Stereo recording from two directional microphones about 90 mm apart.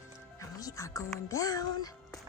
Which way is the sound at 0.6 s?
40° left (ahead or behind).